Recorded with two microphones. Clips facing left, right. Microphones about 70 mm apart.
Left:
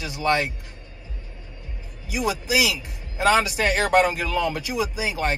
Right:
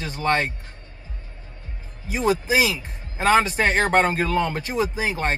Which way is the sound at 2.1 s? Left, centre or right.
Right.